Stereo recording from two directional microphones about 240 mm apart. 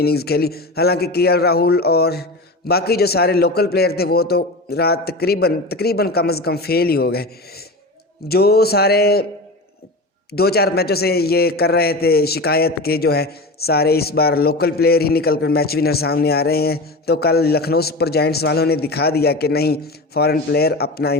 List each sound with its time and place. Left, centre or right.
0.0 s a man's voice: left
10.3 s a man's voice: left